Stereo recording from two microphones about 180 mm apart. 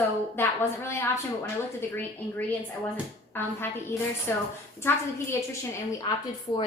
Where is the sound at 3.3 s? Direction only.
10° left (ahead or behind).